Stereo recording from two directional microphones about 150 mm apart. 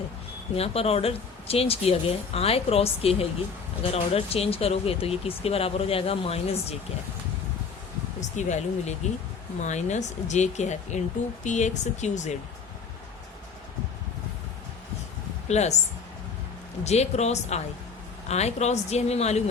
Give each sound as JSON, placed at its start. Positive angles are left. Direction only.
{"t": 0.5, "sound": "speech", "side_deg": 40}
{"t": 8.2, "sound": "speech", "side_deg": 50}
{"t": 15.4, "sound": "speech", "side_deg": 50}
{"t": 16.8, "sound": "speech", "side_deg": 45}